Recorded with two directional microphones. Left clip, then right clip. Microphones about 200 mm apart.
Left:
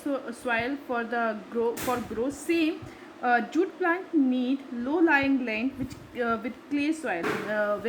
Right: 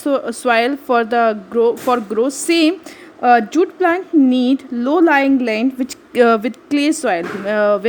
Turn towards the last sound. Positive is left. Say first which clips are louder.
# right 11 dB
turn(degrees=-45)  # may be behind; listen again after turning